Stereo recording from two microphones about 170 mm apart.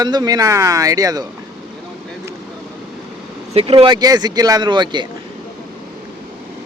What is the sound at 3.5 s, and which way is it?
Speech, 30° right (ahead or behind).